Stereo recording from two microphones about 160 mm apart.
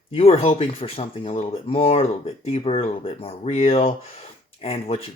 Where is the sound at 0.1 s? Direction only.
40° left (ahead or behind).